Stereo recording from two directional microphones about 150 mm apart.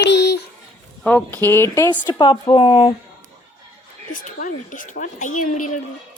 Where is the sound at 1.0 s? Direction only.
10° left (ahead or behind).